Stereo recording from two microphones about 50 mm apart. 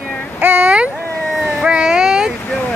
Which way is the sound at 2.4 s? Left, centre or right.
Left.